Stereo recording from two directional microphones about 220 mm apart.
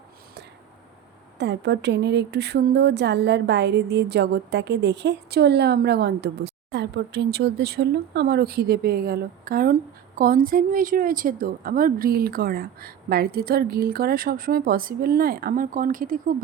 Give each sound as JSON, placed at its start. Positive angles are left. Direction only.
{"t": 1.4, "sound": "a woman's voice", "side_deg": -50}